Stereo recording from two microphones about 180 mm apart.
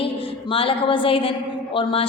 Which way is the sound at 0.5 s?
30° left (ahead or behind).